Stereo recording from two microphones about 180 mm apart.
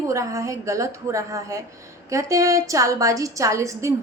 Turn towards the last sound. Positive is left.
turn(degrees=-15)  # may be behind; listen again after turning